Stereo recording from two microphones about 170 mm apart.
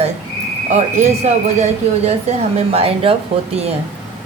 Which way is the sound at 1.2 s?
40° right (ahead or behind).